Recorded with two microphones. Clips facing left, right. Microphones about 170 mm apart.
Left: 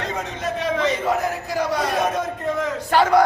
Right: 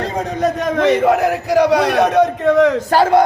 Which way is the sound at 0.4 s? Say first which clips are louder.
Right 6 dB; 45° right (ahead or behind).